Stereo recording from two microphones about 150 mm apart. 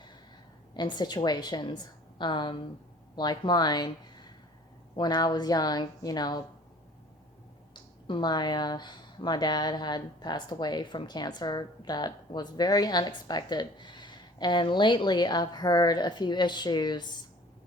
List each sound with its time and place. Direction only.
0.7 s a woman's voice: 30° left (ahead or behind)
7.7 s speech: 30° left (ahead or behind)